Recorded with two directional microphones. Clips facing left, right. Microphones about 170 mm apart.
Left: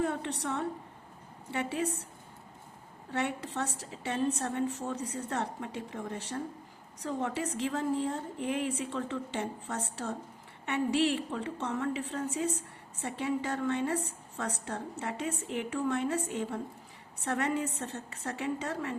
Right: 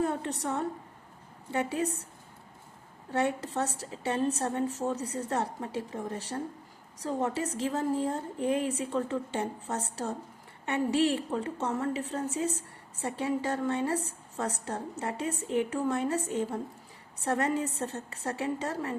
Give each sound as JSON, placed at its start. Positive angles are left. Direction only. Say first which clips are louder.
{"t": 0.0, "sound": "a woman's voice", "louder": "right 2 dB", "side_deg": -40}
{"t": 3.1, "sound": "a woman's voice", "louder": "right 4 dB", "side_deg": -40}